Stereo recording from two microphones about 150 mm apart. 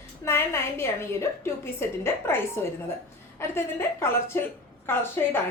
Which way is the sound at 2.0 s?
15° left (ahead or behind).